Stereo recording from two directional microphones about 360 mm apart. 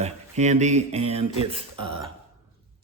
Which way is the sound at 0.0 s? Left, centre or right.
Centre.